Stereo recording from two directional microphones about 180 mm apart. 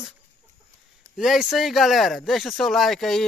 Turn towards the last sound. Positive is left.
turn(degrees=0)  # may be behind; listen again after turning